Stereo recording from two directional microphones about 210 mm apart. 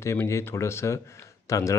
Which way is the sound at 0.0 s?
15° left (ahead or behind).